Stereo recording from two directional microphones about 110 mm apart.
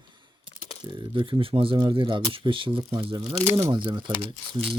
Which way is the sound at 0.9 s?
50° right (ahead or behind).